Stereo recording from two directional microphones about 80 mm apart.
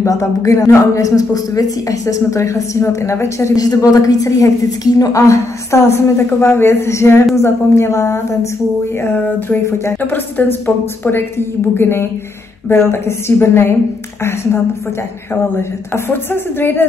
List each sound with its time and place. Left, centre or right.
0.0 s a woman's voice: left
3.5 s a woman's voice: left
9.0 s a woman's voice: left
15.5 s a woman's voice: left